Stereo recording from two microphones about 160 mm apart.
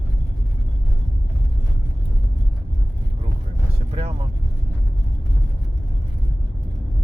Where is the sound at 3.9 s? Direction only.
35° right (ahead or behind).